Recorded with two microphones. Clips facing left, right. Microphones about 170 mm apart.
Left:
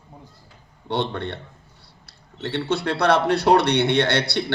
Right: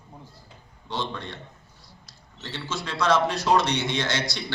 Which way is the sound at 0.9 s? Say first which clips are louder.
Left 7 dB; 65° left (ahead or behind).